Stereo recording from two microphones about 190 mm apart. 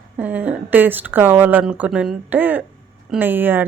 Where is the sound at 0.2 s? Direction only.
10° right (ahead or behind).